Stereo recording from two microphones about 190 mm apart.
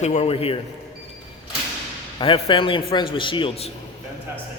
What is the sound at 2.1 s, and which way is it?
A man's voice, 25° left (ahead or behind).